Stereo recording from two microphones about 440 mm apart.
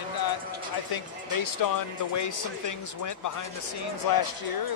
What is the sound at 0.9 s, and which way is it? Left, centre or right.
Speech, left.